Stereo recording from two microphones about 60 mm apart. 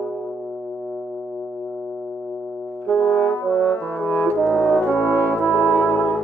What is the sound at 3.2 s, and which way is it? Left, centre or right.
Brass instrument, left.